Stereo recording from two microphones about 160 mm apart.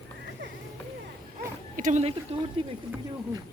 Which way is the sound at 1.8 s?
50° right (ahead or behind).